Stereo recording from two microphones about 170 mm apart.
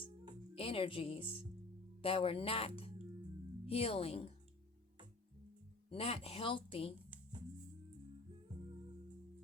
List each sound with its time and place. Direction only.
0.5 s a woman's voice: 35° left (ahead or behind)
5.9 s a woman's voice: 35° left (ahead or behind)